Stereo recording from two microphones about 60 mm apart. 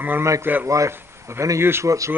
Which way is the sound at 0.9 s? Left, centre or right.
Right.